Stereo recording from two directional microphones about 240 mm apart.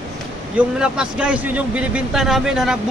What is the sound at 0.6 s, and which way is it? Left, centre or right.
Speech, centre.